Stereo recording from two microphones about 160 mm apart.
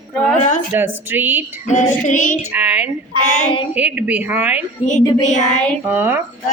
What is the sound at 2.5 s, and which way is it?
A woman's voice, 10° right (ahead or behind).